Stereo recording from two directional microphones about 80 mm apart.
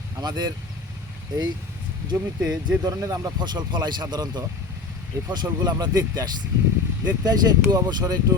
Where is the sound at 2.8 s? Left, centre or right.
Right.